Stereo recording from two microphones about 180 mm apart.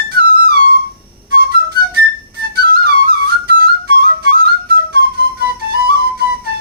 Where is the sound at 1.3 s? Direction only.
60° right (ahead or behind).